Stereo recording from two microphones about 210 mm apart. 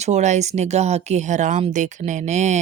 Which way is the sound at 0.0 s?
35° right (ahead or behind).